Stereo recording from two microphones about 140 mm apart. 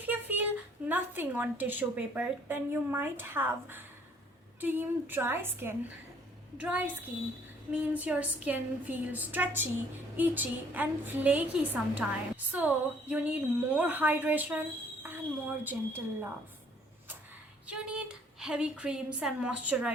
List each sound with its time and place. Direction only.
0.0 s a woman's voice: 10° right (ahead or behind)
17.7 s a woman's voice: 5° right (ahead or behind)